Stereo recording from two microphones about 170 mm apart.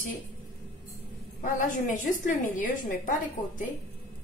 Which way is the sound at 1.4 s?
50° left (ahead or behind).